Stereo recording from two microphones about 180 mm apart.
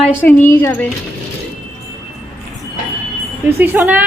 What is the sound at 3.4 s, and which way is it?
Speech, 10° right (ahead or behind).